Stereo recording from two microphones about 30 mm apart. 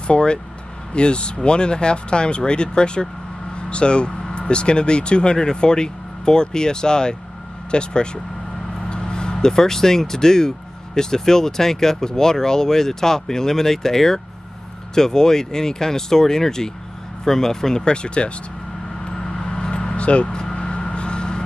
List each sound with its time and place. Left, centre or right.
0.0 s speech: left; by 17.8 s centre
17.8 s speech: left
19.0 s vehicle: left
20.3 s vehicle: left